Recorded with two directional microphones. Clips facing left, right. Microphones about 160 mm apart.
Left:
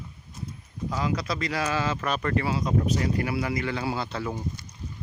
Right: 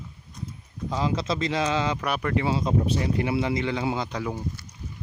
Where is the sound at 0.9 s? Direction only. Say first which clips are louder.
Right 2 dB; 25° right (ahead or behind).